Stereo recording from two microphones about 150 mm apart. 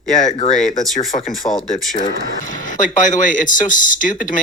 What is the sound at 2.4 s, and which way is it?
Speech, 60° left (ahead or behind).